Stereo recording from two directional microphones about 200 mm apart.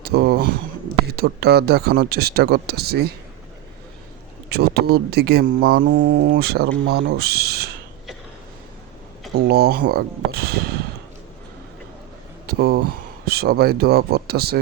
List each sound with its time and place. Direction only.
0.0 s a sound: 55° right (ahead or behind)
1.1 s speech: 55° right (ahead or behind)
4.4 s speech: 55° right (ahead or behind)
9.3 s speech: 50° right (ahead or behind)
12.5 s speech: 50° right (ahead or behind)